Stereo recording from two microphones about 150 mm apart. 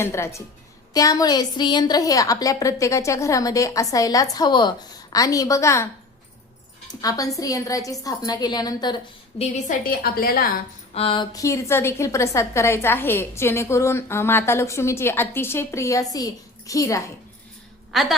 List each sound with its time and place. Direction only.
0.0 s a woman's voice: 20° left (ahead or behind)
7.0 s a woman's voice: 25° left (ahead or behind)
9.4 s a woman's voice: 55° left (ahead or behind); by 10.5 s 80° left
10.9 s a woman's voice: 35° left (ahead or behind)
17.9 s a woman's voice: centre (ahead or behind)